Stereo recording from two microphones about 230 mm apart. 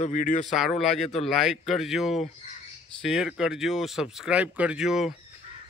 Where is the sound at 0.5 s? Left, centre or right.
Centre.